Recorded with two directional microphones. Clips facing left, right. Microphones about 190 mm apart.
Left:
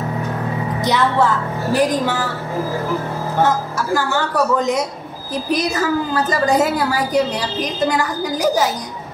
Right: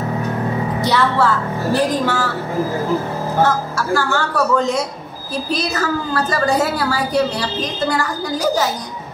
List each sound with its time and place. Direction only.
0.8 s a woman's voice: 20° left (ahead or behind)
3.4 s a woman's voice: 15° left (ahead or behind)